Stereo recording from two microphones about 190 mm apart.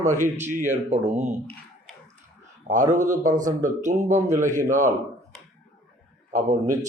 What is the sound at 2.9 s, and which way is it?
A man's voice, 40° right (ahead or behind).